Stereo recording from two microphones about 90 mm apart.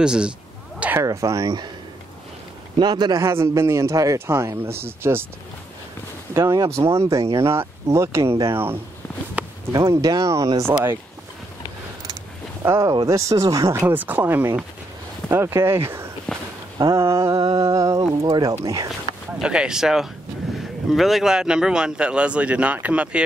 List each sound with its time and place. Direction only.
0.0 s speech: 10° right (ahead or behind)
1.0 s speech: 35° right (ahead or behind)
2.8 s speech: 50° right (ahead or behind)
3.2 s speech: 30° right (ahead or behind)
6.3 s speech: 35° right (ahead or behind)
9.7 s speech: 45° right (ahead or behind)
12.6 s speech: 30° right (ahead or behind)
13.7 s speech: 20° right (ahead or behind)
16.3 s walk: 10° left (ahead or behind)
16.7 s speech: 35° right (ahead or behind)
19.4 s speech: 10° right (ahead or behind)